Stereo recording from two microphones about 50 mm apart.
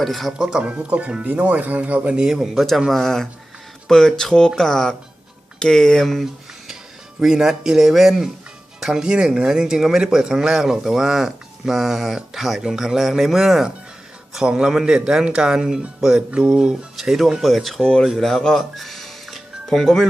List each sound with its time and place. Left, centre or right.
0.0 s speech: centre
0.5 s speech: right
2.1 s speech: centre
2.9 s speech: centre
7.2 s speech: centre
14.3 s speech: centre
16.0 s music: centre
17.0 s speech: centre
18.4 s music: centre